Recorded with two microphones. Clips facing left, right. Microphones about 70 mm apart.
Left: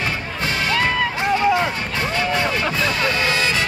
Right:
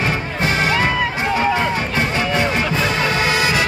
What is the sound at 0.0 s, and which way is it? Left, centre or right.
Music, right.